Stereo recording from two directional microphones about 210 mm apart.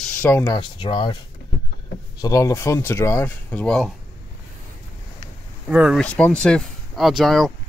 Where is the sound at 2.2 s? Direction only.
15° left (ahead or behind).